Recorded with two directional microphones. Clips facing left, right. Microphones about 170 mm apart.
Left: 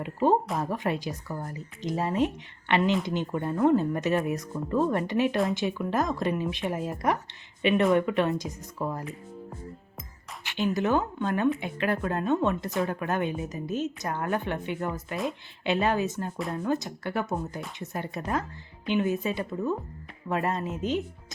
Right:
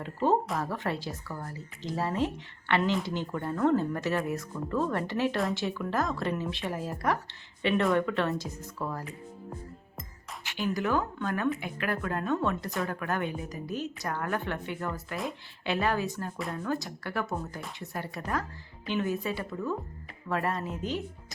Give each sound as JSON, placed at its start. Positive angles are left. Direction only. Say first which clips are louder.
{"t": 0.0, "sound": "speech", "louder": "left 3 dB", "side_deg": 15}
{"t": 10.6, "sound": "a woman's voice", "louder": "left 3 dB", "side_deg": 25}